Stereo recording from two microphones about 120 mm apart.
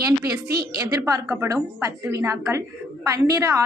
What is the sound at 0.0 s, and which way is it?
Speech, 30° right (ahead or behind).